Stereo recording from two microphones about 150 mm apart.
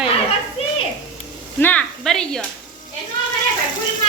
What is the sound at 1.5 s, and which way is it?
Speech, 10° left (ahead or behind).